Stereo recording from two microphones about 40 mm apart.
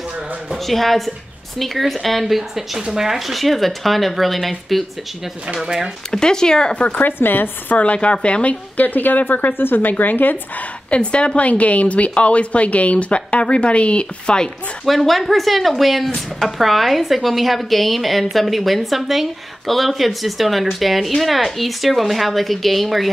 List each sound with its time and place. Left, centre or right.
0.7 s speech: centre
5.6 s speech: centre
6.1 s speech: centre
6.9 s speech: left
7.2 s speech: left
7.7 s a woman's voice: left
10.9 s a woman's voice: left
14.9 s speech: centre